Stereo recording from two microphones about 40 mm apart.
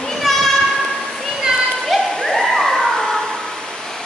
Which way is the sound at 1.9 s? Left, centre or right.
Centre.